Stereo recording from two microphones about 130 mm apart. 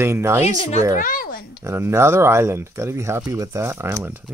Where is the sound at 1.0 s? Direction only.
90° left.